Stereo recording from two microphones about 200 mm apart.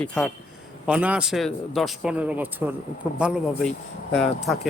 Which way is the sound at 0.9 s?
5° right (ahead or behind).